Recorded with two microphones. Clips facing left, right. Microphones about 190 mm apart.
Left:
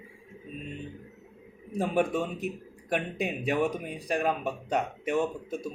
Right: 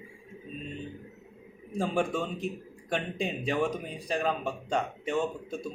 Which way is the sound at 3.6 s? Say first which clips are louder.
Left 1 dB; 10° left (ahead or behind).